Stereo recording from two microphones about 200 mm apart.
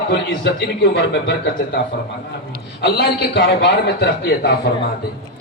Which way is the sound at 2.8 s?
55° left (ahead or behind).